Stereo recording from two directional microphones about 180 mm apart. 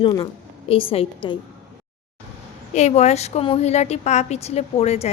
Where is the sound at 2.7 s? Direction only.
40° left (ahead or behind).